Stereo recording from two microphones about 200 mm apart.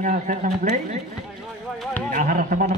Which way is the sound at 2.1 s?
40° right (ahead or behind).